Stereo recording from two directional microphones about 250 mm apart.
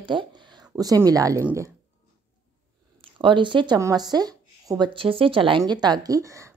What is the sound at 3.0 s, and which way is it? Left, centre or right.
Speech, centre.